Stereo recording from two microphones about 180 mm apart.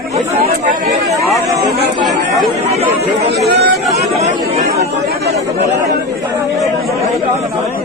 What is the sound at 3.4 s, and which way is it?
Speech, 70° right (ahead or behind).